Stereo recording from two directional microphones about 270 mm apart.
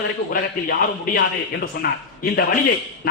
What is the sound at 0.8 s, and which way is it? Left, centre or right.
A man's voice, left.